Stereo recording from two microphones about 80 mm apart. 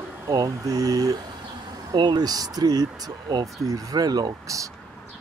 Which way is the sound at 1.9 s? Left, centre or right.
Right.